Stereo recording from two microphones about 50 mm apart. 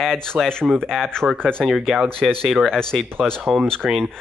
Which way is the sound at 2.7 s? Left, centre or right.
Centre.